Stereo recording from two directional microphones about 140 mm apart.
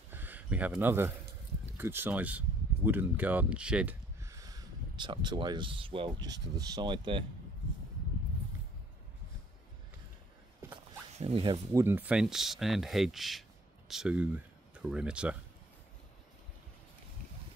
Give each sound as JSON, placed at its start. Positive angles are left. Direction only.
{"t": 0.1, "sound": "a sound", "side_deg": -15}
{"t": 1.8, "sound": "speech", "side_deg": -15}
{"t": 4.2, "sound": "speech", "side_deg": -25}
{"t": 11.1, "sound": "speech", "side_deg": -45}
{"t": 11.7, "sound": "speech", "side_deg": -15}
{"t": 12.2, "sound": "speech", "side_deg": -5}